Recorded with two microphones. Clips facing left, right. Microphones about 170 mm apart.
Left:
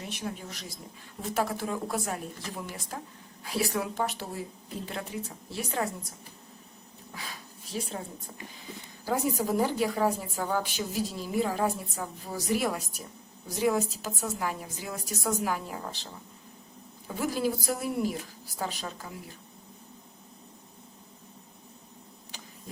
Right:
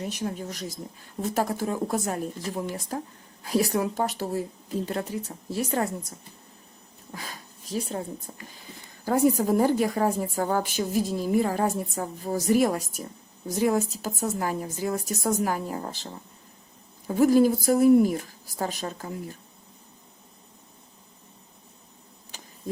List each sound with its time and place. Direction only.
0.0 s a woman's voice: 40° right (ahead or behind)
7.1 s a sound: 40° right (ahead or behind)
9.0 s a woman's voice: 50° right (ahead or behind)
17.2 s a woman's voice: 45° right (ahead or behind)